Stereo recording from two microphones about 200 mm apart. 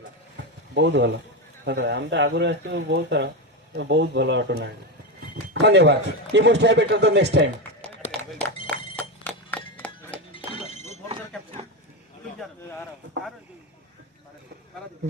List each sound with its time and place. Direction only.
0.3 s a sound: 60° right (ahead or behind)
1.6 s speech: 60° right (ahead or behind)
8.4 s music: 5° left (ahead or behind)
10.7 s alarm: 30° left (ahead or behind)